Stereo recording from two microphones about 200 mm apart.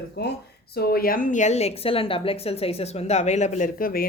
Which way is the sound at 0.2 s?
55° left (ahead or behind).